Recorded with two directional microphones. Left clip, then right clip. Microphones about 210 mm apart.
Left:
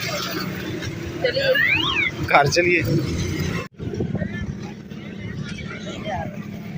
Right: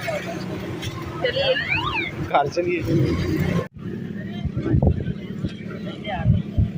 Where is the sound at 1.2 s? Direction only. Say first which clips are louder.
Left 3 dB; 35° right (ahead or behind).